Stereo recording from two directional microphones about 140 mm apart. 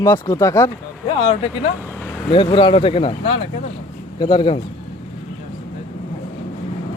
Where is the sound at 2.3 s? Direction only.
35° left (ahead or behind).